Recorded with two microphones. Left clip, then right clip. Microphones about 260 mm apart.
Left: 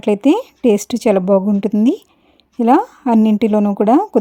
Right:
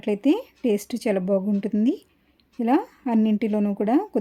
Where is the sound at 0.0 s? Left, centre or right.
Left.